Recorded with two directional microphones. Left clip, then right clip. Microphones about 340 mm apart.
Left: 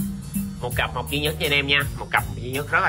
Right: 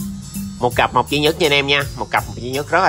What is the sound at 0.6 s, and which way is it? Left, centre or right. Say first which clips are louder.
Speech: right 11 dB; centre.